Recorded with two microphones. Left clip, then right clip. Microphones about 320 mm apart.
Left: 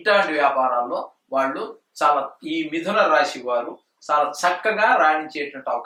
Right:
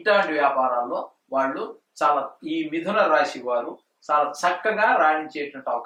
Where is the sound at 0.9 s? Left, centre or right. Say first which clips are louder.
Left 2 dB; centre.